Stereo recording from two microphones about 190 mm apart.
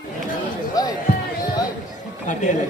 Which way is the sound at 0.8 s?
20° left (ahead or behind).